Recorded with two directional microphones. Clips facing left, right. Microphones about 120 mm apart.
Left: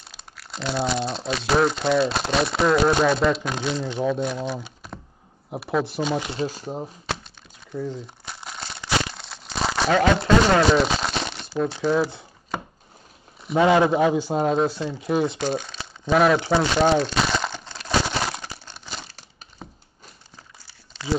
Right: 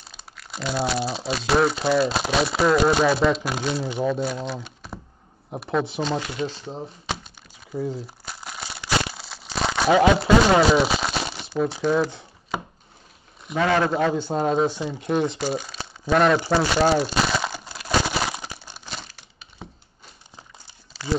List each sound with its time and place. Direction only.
0.0 s speech: centre (ahead or behind)
6.3 s speech: 40° left (ahead or behind)
7.9 s crumpling: centre (ahead or behind)
9.8 s speech: 10° right (ahead or behind)
13.6 s speech: 15° left (ahead or behind)
16.4 s crumpling: 5° right (ahead or behind)
20.3 s a sound: 20° right (ahead or behind)
20.9 s a sound: 5° right (ahead or behind)